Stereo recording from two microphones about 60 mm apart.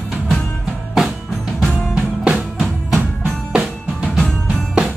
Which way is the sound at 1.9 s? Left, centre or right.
Centre.